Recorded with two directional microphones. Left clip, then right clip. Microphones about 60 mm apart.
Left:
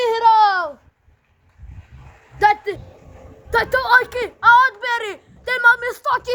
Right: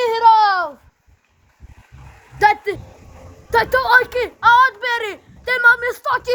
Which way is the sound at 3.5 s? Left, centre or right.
Right.